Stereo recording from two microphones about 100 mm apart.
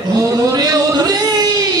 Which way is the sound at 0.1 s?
40° right (ahead or behind).